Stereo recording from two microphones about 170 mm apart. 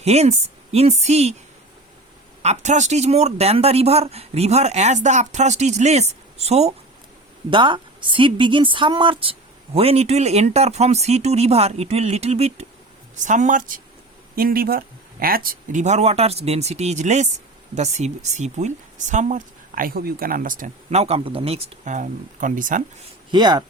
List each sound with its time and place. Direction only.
0.0 s a woman's voice: 40° right (ahead or behind)
2.4 s a woman's voice: 40° right (ahead or behind)
7.5 s a woman's voice: 30° right (ahead or behind); by 21.0 s 50° right (ahead or behind)
21.0 s speech: 35° right (ahead or behind); by 22.8 s 50° right (ahead or behind)
23.3 s speech: 25° right (ahead or behind)